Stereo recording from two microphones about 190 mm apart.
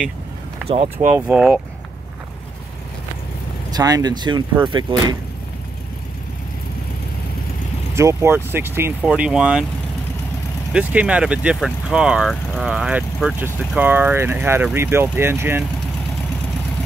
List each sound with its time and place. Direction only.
1.1 s speech: 5° right (ahead or behind)
3.7 s speech: 20° right (ahead or behind)
7.9 s speech: 15° right (ahead or behind)
10.7 s speech: 5° right (ahead or behind)